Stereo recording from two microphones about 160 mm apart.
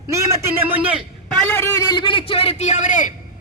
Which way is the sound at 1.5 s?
15° left (ahead or behind).